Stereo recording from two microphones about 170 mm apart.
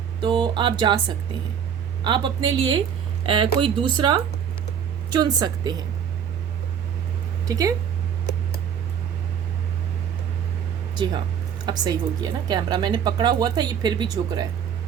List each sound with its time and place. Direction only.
0.2 s speech: 25° right (ahead or behind)
7.4 s speech: 20° right (ahead or behind)
11.6 s speech: 25° right (ahead or behind)